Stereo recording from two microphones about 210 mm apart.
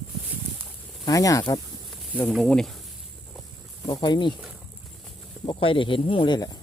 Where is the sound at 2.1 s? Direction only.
5° left (ahead or behind).